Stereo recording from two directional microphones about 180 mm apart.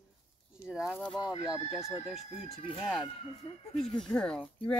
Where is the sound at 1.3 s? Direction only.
20° left (ahead or behind).